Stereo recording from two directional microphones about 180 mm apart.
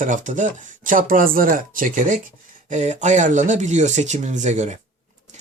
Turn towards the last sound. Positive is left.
turn(degrees=-40)  # may be behind; listen again after turning